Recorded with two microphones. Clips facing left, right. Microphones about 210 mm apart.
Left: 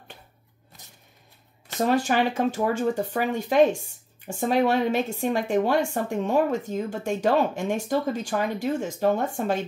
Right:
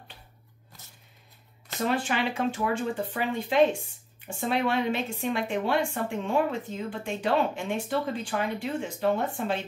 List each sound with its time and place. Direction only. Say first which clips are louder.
1.9 s a woman's voice: left 5 dB; 40° left (ahead or behind)